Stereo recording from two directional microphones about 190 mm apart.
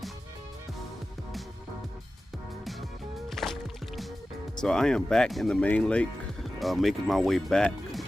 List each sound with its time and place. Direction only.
3.2 s music: centre (ahead or behind)
4.5 s speech: 5° left (ahead or behind)